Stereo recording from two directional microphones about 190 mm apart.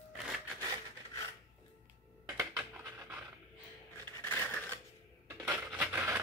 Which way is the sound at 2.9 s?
10° right (ahead or behind).